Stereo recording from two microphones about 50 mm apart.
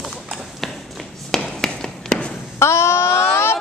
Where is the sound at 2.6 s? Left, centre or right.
Left.